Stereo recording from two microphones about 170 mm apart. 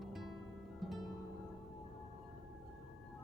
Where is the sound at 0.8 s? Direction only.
Centre (ahead or behind).